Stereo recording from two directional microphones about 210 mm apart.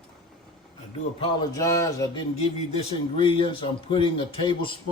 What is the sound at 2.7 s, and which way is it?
A man's voice, 25° left (ahead or behind).